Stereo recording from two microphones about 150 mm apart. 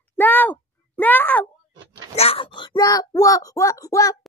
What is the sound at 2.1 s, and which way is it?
Speech, 40° left (ahead or behind).